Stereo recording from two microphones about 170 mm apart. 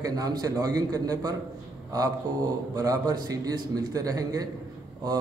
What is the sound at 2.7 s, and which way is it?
A man's voice, 20° right (ahead or behind).